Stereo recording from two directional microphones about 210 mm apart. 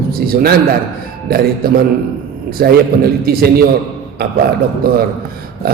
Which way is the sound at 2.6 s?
50° right (ahead or behind).